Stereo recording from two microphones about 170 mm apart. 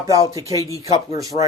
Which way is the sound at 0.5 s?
20° left (ahead or behind).